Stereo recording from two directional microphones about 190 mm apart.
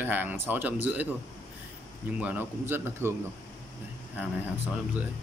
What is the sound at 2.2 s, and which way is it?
Speech, 10° right (ahead or behind).